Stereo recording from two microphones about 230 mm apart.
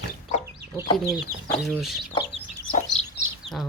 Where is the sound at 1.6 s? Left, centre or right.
Centre.